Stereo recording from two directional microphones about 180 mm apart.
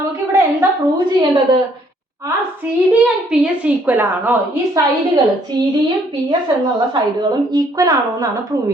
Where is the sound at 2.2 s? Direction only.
10° right (ahead or behind).